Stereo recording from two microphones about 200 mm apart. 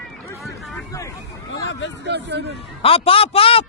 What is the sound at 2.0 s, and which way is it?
Speech, 60° right (ahead or behind).